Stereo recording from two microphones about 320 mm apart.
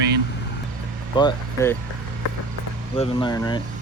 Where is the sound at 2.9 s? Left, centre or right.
Centre.